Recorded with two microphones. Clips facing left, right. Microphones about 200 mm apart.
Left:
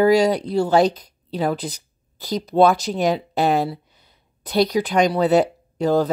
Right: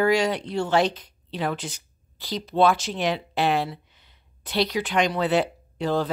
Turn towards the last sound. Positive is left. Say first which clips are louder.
# left 6 dB
turn(degrees=40)  # may be behind; listen again after turning